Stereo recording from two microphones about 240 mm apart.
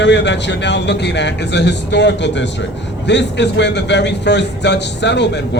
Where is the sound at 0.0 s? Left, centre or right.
Left.